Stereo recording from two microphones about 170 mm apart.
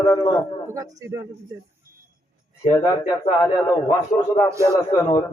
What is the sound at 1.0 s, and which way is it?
Speech, 15° right (ahead or behind).